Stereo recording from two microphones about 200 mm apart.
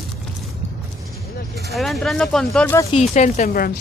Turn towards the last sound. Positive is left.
turn(degrees=45)  # may be behind; listen again after turning